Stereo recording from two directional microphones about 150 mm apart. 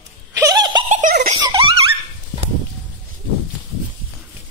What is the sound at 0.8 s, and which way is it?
Giggle, 60° right (ahead or behind).